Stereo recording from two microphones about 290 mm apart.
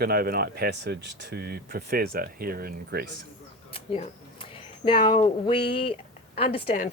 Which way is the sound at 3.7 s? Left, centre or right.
Centre.